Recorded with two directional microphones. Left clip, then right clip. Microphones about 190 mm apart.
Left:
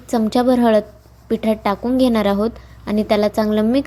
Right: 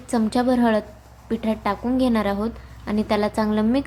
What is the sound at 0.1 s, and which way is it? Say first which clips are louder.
A woman's voice: left 5 dB; 25° left (ahead or behind).